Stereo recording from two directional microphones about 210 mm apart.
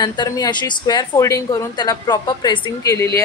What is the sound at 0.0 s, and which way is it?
Speech, 20° left (ahead or behind).